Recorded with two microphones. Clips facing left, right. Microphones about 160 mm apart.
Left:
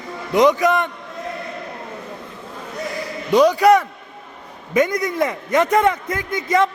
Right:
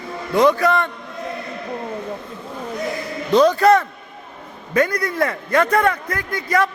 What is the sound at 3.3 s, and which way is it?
A man's voice, 15° left (ahead or behind).